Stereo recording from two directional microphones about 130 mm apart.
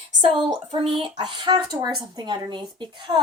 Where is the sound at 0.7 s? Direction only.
45° right (ahead or behind).